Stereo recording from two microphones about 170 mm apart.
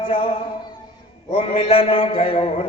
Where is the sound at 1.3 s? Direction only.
40° left (ahead or behind).